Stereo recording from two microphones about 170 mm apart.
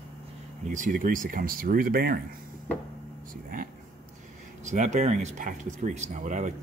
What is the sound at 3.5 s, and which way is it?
Speech, 55° right (ahead or behind).